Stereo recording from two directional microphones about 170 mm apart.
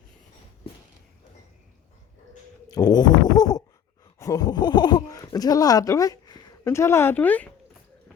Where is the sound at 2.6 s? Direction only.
20° left (ahead or behind).